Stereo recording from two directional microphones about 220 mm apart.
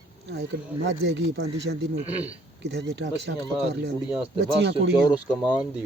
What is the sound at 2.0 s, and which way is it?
Speech, 5° right (ahead or behind).